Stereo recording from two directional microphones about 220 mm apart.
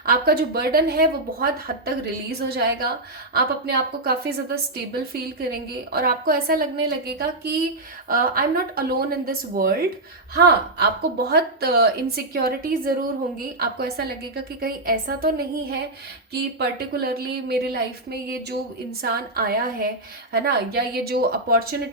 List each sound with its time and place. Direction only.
0.0 s a woman's voice: 45° right (ahead or behind)
5.9 s a woman's voice: 45° right (ahead or behind)